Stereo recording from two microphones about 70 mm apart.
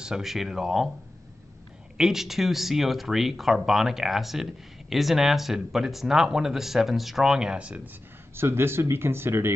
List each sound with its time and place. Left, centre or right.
0.0 s speech: centre
2.0 s speech: centre
8.4 s speech: right